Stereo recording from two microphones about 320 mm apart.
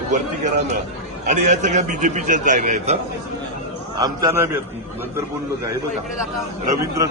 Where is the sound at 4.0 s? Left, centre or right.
Centre.